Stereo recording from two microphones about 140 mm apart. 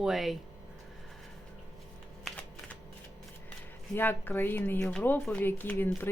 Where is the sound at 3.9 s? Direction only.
15° left (ahead or behind).